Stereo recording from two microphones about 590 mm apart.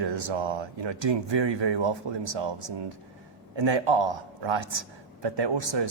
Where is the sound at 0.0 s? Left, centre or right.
Right.